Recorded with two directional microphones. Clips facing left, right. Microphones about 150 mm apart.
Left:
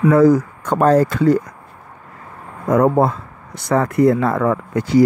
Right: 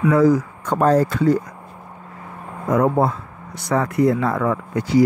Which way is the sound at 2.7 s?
50° left (ahead or behind).